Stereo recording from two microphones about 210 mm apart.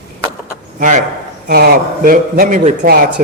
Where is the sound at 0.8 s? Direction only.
35° right (ahead or behind).